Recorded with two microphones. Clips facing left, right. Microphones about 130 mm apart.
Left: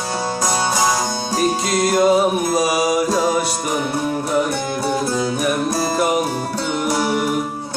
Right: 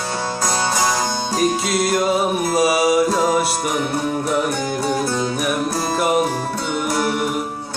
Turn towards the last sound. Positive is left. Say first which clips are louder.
# left 1 dB
turn(degrees=5)  # may be behind; listen again after turning